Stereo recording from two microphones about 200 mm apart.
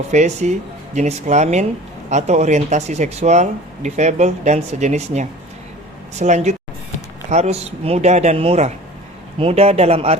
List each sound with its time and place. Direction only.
0.1 s speech: 35° right (ahead or behind)